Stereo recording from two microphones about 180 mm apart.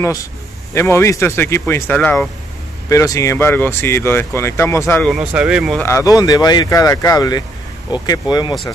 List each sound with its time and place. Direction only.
0.7 s speech: 15° left (ahead or behind)
4.9 s speech: centre (ahead or behind)
5.8 s speech: 15° left (ahead or behind)